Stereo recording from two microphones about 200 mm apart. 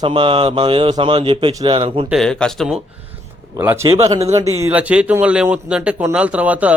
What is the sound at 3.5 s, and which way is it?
Speech, 10° right (ahead or behind).